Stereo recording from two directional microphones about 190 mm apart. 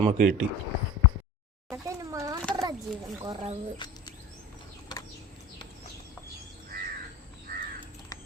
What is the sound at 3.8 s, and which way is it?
Bird, 25° left (ahead or behind).